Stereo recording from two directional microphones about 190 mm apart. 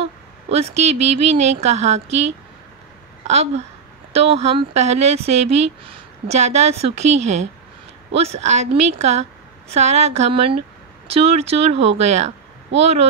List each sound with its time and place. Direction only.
0.0 s speech: 35° right (ahead or behind)
3.3 s speech: 35° right (ahead or behind)